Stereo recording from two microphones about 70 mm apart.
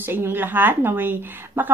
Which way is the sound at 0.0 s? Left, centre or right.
Right.